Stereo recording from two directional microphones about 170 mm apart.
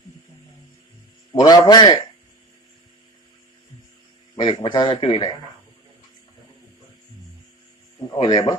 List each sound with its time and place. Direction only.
1.3 s speech: 25° left (ahead or behind)
4.4 s speech: 25° left (ahead or behind)
8.1 s speech: 25° left (ahead or behind)